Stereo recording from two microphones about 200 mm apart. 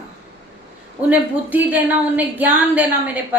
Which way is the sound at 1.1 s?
10° right (ahead or behind).